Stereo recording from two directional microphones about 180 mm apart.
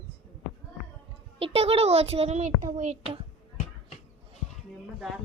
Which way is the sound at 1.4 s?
35° right (ahead or behind).